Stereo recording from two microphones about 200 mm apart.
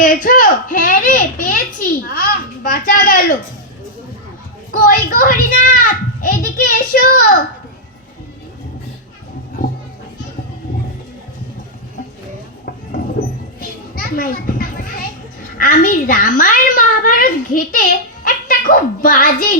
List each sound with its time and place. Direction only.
0.0 s a child's voice: 40° left (ahead or behind)
4.7 s a child's voice: 45° left (ahead or behind)
13.6 s children playing: 45° left (ahead or behind)
15.5 s a child's voice: 45° left (ahead or behind)